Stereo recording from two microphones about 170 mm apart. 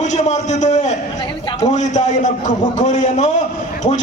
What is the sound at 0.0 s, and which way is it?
A man's voice, 45° left (ahead or behind).